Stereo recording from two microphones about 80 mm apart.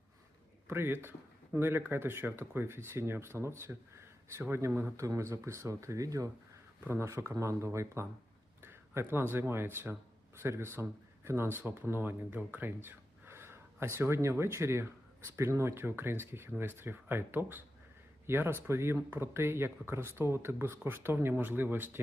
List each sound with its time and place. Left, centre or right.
0.7 s speech: right
6.8 s speech: right